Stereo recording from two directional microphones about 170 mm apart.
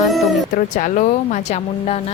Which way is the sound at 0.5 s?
50° left (ahead or behind).